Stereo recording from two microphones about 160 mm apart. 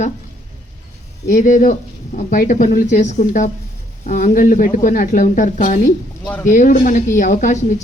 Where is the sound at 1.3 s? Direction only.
55° left (ahead or behind).